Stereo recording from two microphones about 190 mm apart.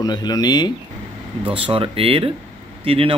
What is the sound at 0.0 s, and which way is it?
Speech, 20° left (ahead or behind).